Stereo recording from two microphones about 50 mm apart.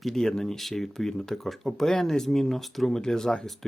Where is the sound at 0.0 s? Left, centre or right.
Centre.